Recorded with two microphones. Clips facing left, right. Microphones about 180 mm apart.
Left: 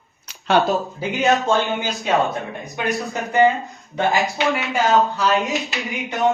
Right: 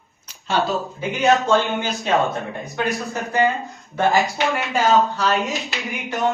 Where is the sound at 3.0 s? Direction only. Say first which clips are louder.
Left 6 dB; 15° left (ahead or behind).